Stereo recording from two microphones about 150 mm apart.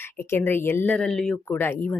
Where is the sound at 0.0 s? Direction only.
15° left (ahead or behind).